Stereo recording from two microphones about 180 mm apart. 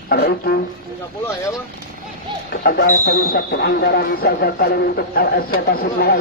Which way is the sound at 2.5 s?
60° left (ahead or behind).